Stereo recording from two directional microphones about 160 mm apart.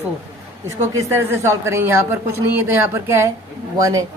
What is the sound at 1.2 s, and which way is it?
A woman's voice, 15° right (ahead or behind).